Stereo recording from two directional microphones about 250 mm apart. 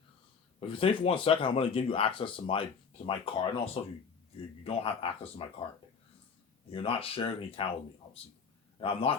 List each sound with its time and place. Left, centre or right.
0.6 s speech: left
6.7 s speech: left
8.8 s speech: left